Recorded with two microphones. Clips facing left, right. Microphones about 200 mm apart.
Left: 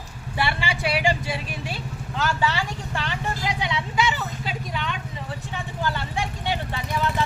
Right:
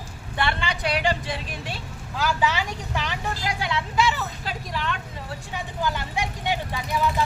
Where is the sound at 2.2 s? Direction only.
10° right (ahead or behind).